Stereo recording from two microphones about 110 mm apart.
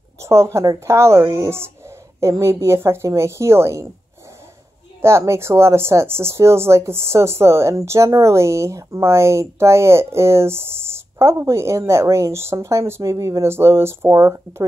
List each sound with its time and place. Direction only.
0.2 s speech: 25° right (ahead or behind)
5.0 s speech: 25° right (ahead or behind)